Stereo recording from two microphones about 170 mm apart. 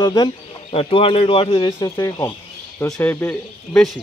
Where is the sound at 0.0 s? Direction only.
25° left (ahead or behind).